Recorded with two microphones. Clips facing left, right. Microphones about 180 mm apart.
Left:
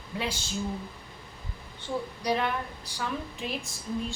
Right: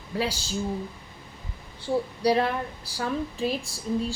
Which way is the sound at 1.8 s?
35° right (ahead or behind).